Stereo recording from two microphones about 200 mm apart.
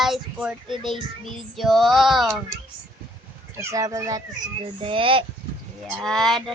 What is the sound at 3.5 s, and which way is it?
Speech, 15° right (ahead or behind).